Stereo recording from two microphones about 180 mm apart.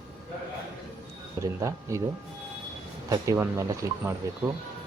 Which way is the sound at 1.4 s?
15° right (ahead or behind).